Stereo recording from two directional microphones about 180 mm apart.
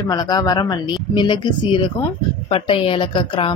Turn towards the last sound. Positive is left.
turn(degrees=30)  # may be behind; listen again after turning